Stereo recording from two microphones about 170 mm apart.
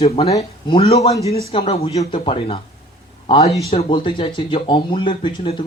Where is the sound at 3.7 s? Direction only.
30° left (ahead or behind).